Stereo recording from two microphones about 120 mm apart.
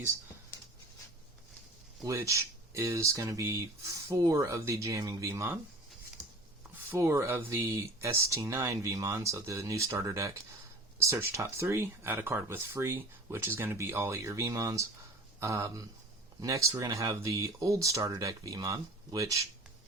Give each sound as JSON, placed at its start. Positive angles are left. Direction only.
{"t": 2.0, "sound": "speech", "side_deg": -25}
{"t": 6.9, "sound": "speech", "side_deg": -25}